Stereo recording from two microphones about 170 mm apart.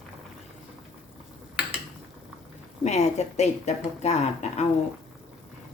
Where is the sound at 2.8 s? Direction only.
40° left (ahead or behind).